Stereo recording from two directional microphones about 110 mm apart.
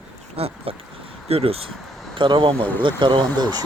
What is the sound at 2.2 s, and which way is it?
Speech, 50° right (ahead or behind).